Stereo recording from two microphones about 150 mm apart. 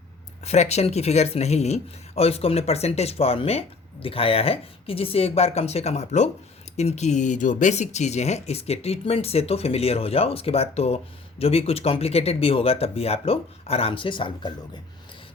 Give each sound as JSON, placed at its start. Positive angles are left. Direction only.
{"t": 0.4, "sound": "speech", "side_deg": 45}